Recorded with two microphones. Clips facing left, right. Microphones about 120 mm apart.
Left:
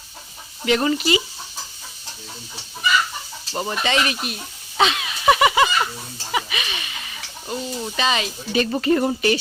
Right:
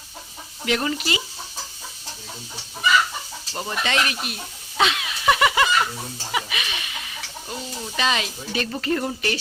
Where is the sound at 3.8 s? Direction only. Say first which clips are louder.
Left 1 dB; centre (ahead or behind).